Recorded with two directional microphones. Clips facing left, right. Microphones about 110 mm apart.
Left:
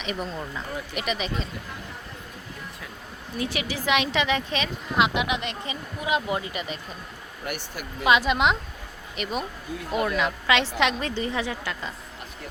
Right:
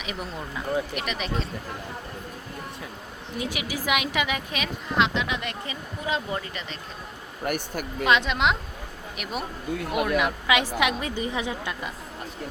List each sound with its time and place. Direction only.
0.0 s speech: 5° right (ahead or behind)
3.4 s a woman's voice: 10° right (ahead or behind)
4.9 s speech: 10° left (ahead or behind)
7.4 s speech: 45° right (ahead or behind)
8.0 s a woman's voice: 5° left (ahead or behind); by 11.9 s 20° right (ahead or behind)